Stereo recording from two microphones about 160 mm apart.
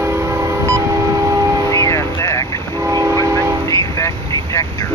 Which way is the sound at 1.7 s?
20° left (ahead or behind).